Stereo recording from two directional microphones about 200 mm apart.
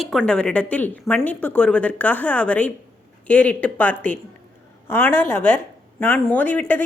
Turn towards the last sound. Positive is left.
turn(degrees=10)  # may be behind; listen again after turning